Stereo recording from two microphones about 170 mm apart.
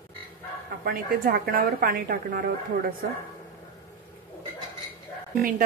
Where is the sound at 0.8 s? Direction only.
60° right (ahead or behind).